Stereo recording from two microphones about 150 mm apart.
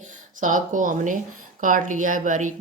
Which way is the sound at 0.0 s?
55° right (ahead or behind).